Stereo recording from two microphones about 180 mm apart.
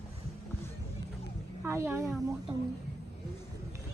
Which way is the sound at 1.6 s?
15° right (ahead or behind).